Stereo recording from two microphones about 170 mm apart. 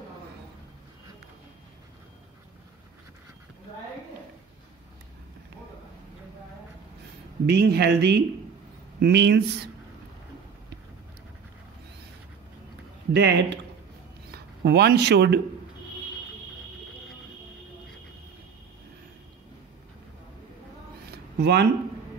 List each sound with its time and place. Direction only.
7.4 s speech: 75° right (ahead or behind)
13.1 s speech: 85° right
14.3 s speech: 70° right (ahead or behind)
21.4 s speech: 85° right